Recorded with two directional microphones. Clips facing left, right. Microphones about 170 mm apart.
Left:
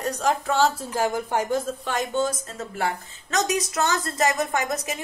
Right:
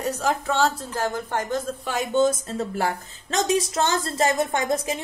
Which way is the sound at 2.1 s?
25° right (ahead or behind).